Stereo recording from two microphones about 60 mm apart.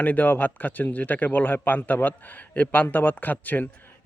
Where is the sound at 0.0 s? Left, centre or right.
Left.